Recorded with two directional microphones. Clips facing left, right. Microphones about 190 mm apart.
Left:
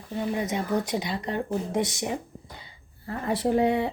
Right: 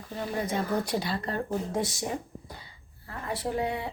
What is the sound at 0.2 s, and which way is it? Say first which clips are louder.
Speech: left 2 dB; 15° left (ahead or behind).